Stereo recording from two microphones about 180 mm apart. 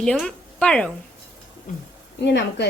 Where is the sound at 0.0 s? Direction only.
5° left (ahead or behind).